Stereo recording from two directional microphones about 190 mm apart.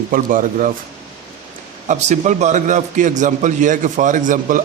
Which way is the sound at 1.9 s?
40° right (ahead or behind).